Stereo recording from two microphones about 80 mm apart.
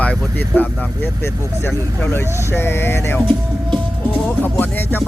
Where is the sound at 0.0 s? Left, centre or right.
Centre.